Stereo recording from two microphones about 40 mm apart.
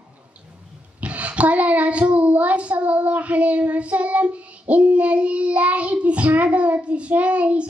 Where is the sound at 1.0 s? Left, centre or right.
Right.